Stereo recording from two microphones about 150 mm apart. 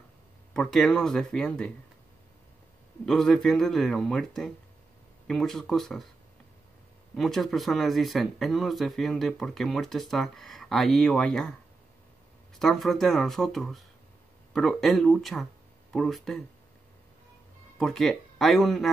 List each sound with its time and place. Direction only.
0.5 s speech: 5° left (ahead or behind)
3.1 s speech: 5° left (ahead or behind)
7.2 s speech: centre (ahead or behind)
12.5 s speech: centre (ahead or behind)
17.7 s speech: centre (ahead or behind)